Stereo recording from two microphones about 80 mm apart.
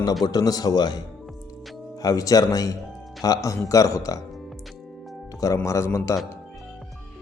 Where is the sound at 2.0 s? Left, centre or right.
Left.